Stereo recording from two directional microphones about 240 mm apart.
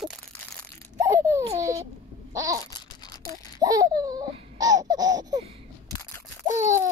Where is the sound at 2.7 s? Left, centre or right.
Centre.